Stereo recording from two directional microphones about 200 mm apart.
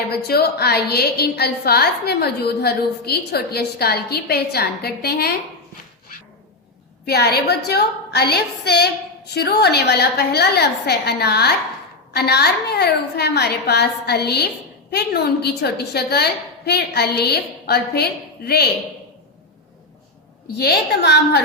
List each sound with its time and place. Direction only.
0.1 s a woman's voice: 50° left (ahead or behind)
7.0 s a woman's voice: 55° left (ahead or behind)
20.6 s a woman's voice: 55° left (ahead or behind)